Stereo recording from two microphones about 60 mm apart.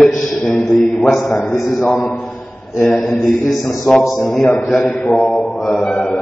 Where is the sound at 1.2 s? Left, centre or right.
Centre.